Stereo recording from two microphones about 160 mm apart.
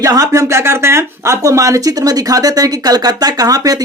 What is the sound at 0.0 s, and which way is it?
Speech, 20° right (ahead or behind).